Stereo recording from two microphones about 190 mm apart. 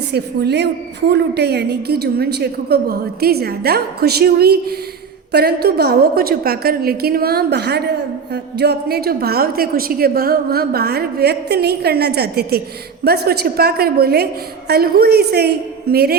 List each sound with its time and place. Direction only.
0.1 s a woman's voice: 60° right (ahead or behind)